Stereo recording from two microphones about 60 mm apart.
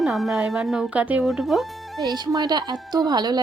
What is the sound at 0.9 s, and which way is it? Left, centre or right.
Speech, right.